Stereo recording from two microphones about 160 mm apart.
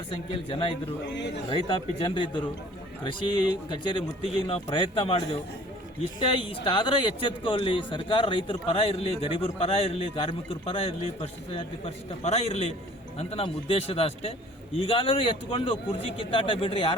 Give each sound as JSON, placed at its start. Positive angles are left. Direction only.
{"t": 0.1, "sound": "speech", "side_deg": 30}